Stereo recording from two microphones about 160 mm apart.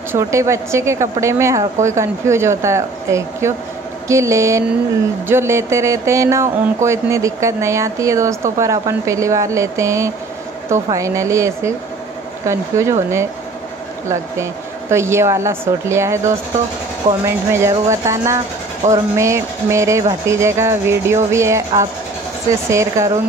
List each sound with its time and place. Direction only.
0.1 s speech: 20° right (ahead or behind)